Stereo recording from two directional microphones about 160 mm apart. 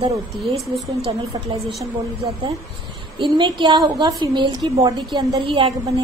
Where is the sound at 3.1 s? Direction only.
30° right (ahead or behind).